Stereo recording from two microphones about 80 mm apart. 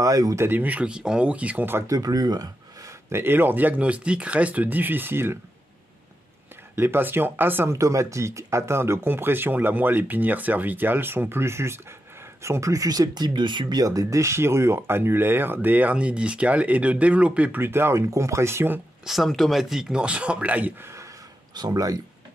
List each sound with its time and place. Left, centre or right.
0.0 s speech: right
0.5 s a man's voice: centre
1.9 s speech: right
3.1 s speech: right
6.7 s speech: right
7.7 s speech: right; by 17.6 s centre
17.6 s speech: right
19.0 s a man's voice: centre
20.8 s a sound: right
21.5 s speech: right